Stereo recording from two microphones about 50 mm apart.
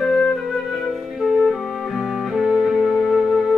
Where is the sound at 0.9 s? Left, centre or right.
Centre.